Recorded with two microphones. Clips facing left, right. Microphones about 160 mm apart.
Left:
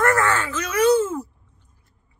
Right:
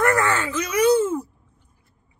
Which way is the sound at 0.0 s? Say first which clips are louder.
Even; 15° right (ahead or behind).